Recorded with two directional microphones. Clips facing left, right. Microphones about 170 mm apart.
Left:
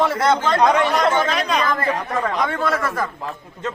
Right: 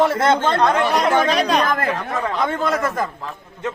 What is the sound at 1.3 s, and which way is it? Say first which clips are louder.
Speech: right 3 dB; 35° right (ahead or behind).